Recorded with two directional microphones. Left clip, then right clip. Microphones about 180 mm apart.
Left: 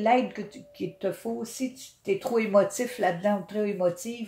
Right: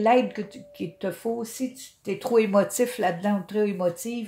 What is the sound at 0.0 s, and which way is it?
Speech, 40° right (ahead or behind).